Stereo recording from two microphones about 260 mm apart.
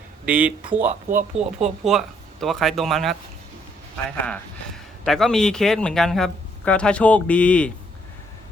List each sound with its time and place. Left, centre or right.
0.3 s speech: centre
0.9 s speech: right
1.8 s speech: centre
5.0 s speech: centre